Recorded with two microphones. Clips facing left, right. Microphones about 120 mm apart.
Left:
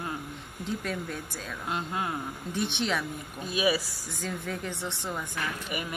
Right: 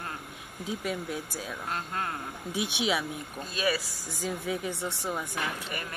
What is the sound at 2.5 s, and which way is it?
Speech, 5° right (ahead or behind).